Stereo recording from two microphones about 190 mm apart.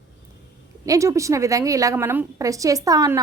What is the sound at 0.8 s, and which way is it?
A woman's voice, 15° right (ahead or behind).